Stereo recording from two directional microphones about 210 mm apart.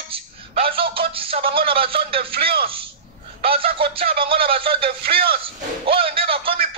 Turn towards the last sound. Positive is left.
turn(degrees=-25)  # may be behind; listen again after turning